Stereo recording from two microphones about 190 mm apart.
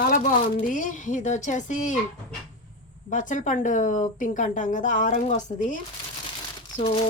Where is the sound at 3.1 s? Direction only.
40° left (ahead or behind).